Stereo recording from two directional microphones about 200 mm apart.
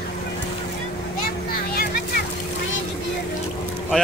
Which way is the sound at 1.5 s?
50° left (ahead or behind).